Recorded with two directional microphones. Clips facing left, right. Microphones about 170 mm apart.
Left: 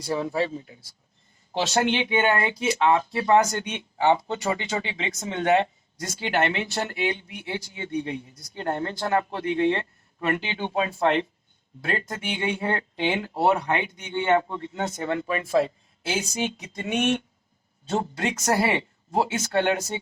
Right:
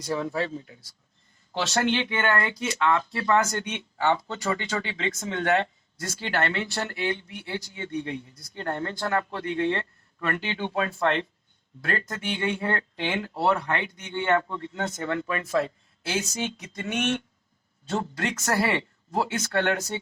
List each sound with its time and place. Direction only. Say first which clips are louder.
0.0 s speech: left 2 dB; 30° left (ahead or behind)
16.3 s a sound: left 3 dB; 15° left (ahead or behind)
17.8 s speech: left 2 dB; 25° left (ahead or behind)